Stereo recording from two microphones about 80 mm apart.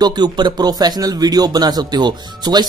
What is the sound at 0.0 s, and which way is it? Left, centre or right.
A man's voice, right.